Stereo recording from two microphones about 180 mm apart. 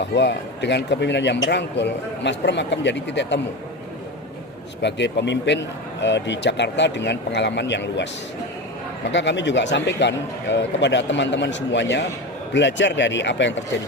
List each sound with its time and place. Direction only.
0.2 s a man's voice: 70° left (ahead or behind)
4.8 s a man's voice: 75° left (ahead or behind)
9.1 s speech: 80° left